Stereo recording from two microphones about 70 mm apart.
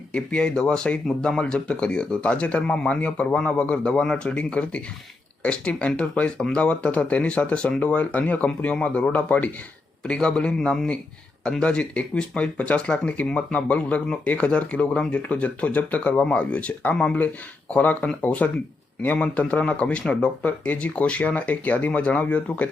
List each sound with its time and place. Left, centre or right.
0.1 s speech: centre
10.0 s speech: centre